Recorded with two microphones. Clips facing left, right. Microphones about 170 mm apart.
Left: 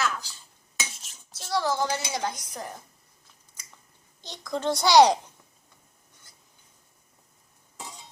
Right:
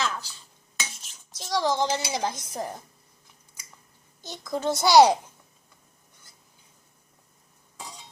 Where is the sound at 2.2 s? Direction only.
30° right (ahead or behind).